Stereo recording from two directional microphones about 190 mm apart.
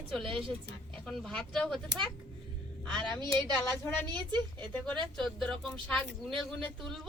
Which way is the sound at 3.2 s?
20° right (ahead or behind).